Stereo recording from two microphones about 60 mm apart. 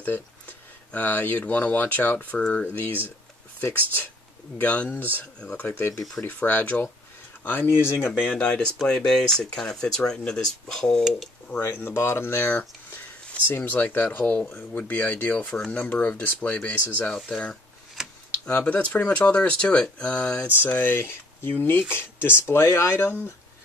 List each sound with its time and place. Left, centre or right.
0.0 s speech: left
4.6 s speech: left
5.4 s speech: centre
6.2 s speech: left
8.2 s speech: left
11.7 s speech: left; by 20.4 s centre
20.6 s speech: left